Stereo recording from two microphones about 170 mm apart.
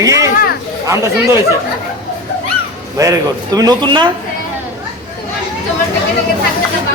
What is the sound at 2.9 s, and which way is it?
A man's voice, 20° right (ahead or behind).